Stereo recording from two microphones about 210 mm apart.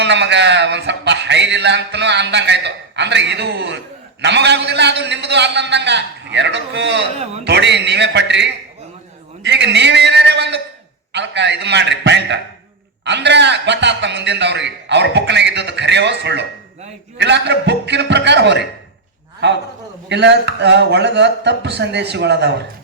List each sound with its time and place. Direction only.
0.0 s a man's voice: 55° right (ahead or behind)
20.1 s speech: 55° right (ahead or behind)